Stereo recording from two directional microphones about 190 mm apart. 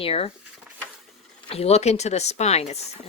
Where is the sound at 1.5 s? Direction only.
35° left (ahead or behind).